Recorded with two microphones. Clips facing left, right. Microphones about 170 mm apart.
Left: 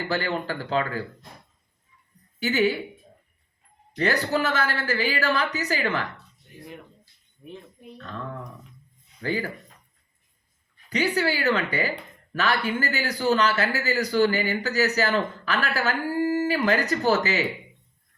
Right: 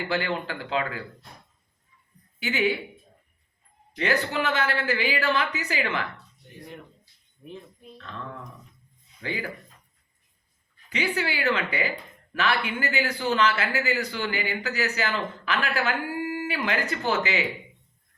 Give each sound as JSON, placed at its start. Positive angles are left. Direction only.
{"t": 0.1, "sound": "speech", "side_deg": 40}
{"t": 2.4, "sound": "speech", "side_deg": 40}
{"t": 3.9, "sound": "speech", "side_deg": 40}
{"t": 7.9, "sound": "speech", "side_deg": 40}
{"t": 9.2, "sound": "speech", "side_deg": 40}
{"t": 10.8, "sound": "speech", "side_deg": 40}